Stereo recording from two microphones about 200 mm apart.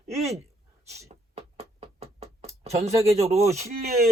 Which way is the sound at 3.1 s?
30° right (ahead or behind).